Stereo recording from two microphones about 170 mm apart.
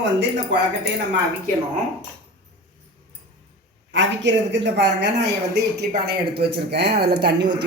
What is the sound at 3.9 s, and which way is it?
Speech, 90° right.